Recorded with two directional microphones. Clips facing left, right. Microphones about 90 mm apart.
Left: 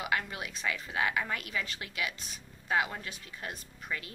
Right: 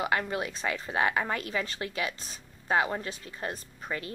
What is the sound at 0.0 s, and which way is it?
Speech, 35° right (ahead or behind).